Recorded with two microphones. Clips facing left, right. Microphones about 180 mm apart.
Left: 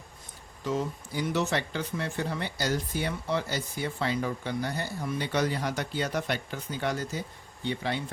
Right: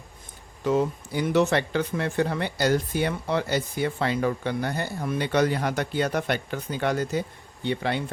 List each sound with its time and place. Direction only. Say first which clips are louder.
0.6 s speech: right 7 dB; 60° right (ahead or behind)